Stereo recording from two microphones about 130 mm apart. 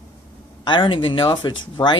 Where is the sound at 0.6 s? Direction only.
40° left (ahead or behind).